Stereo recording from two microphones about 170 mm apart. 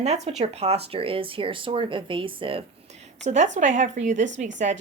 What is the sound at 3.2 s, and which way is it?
Speech, 45° right (ahead or behind).